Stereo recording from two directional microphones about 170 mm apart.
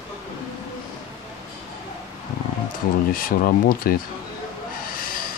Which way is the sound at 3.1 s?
55° left (ahead or behind).